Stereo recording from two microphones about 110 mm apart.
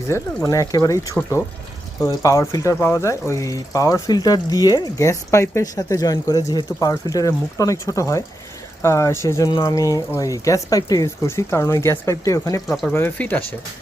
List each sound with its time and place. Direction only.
0.1 s speech: 25° left (ahead or behind)
12.6 s speech: centre (ahead or behind)
12.9 s speech: 15° left (ahead or behind)